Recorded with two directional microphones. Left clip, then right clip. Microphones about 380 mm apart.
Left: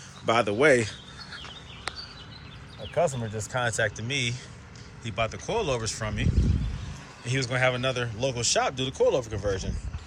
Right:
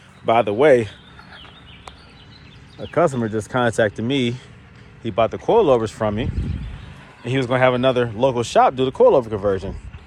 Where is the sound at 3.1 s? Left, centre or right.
Centre.